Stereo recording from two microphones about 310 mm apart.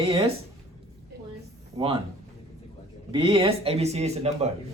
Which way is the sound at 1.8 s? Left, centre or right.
Centre.